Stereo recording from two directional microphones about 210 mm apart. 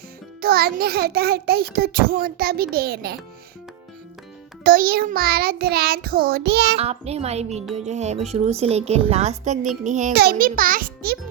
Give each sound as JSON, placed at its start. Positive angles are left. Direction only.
{"t": 0.4, "sound": "child singing", "side_deg": -45}
{"t": 4.6, "sound": "child singing", "side_deg": -45}
{"t": 6.7, "sound": "a woman's voice", "side_deg": -30}
{"t": 7.6, "sound": "music", "side_deg": 0}
{"t": 7.9, "sound": "a woman's voice", "side_deg": -35}
{"t": 10.2, "sound": "child singing", "side_deg": -45}